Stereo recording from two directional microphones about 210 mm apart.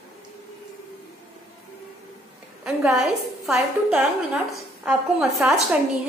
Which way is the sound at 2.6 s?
5° right (ahead or behind).